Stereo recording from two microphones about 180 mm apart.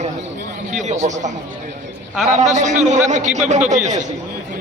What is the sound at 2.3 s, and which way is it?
A man's voice, 40° right (ahead or behind).